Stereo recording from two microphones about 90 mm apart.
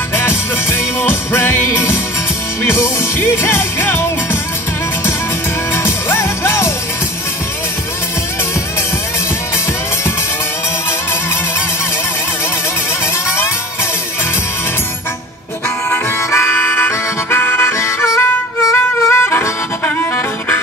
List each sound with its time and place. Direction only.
0.1 s music: 25° left (ahead or behind)
5.8 s music: 30° left (ahead or behind)
15.9 s harmonica: 30° left (ahead or behind)